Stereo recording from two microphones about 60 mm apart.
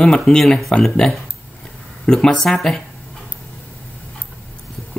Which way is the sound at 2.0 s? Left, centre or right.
Centre.